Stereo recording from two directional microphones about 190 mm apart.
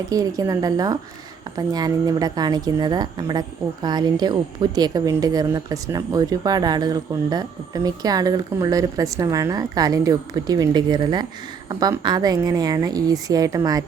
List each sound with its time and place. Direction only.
0.1 s a woman's voice: 20° right (ahead or behind)